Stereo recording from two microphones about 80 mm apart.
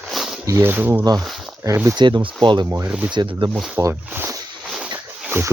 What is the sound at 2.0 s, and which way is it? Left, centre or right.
Speech, right.